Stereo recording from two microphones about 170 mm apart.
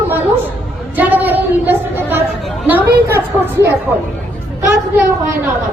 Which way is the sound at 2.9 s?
65° right (ahead or behind).